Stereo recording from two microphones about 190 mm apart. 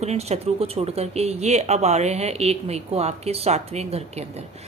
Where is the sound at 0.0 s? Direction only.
35° right (ahead or behind).